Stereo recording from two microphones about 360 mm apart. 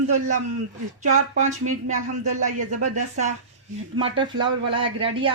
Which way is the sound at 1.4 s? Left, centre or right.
Centre.